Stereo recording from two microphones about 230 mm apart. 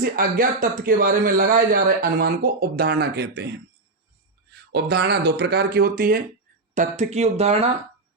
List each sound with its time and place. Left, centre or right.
0.0 s a man's voice: right
4.7 s speech: right